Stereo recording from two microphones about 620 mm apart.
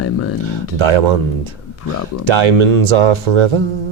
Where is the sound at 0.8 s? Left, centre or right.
Right.